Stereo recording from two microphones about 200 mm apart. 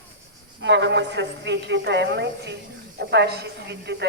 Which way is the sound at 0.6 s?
65° right (ahead or behind).